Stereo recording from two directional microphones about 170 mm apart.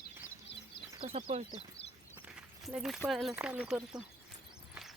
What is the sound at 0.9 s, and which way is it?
Speech, 35° right (ahead or behind).